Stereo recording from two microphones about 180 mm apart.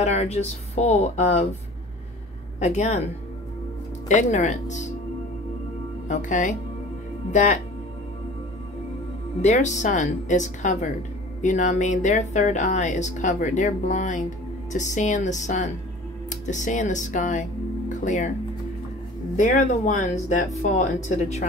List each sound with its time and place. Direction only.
0.0 s speech: 40° left (ahead or behind)
2.6 s speech: 40° left (ahead or behind)
4.1 s speech: 40° left (ahead or behind)
6.0 s speech: 45° left (ahead or behind)
9.4 s speech: 40° left (ahead or behind)
19.3 s speech: 45° left (ahead or behind)